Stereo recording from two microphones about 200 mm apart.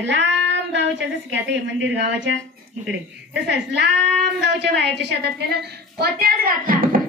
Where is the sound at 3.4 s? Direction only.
60° right (ahead or behind).